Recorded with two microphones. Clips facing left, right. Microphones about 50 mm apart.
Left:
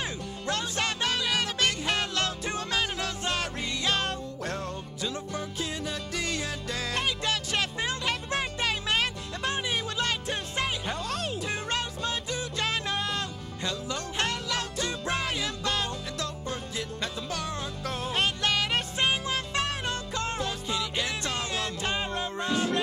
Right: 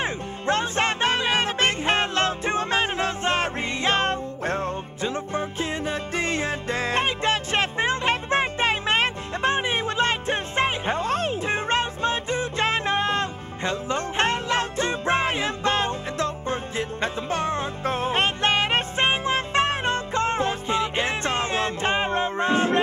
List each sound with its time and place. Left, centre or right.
0.0 s music: right